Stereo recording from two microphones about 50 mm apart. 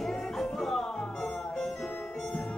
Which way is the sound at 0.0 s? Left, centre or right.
Centre.